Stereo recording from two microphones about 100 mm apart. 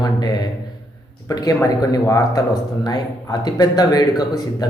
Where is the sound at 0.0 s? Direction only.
45° left (ahead or behind).